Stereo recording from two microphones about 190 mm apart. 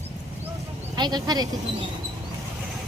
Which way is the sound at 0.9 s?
20° right (ahead or behind).